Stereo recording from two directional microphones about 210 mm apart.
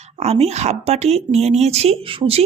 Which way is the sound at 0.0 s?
30° right (ahead or behind).